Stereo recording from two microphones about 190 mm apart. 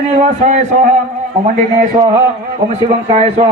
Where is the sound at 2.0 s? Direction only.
25° right (ahead or behind).